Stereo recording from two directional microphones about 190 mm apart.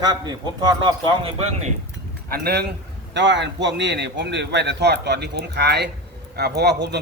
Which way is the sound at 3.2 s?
65° right (ahead or behind).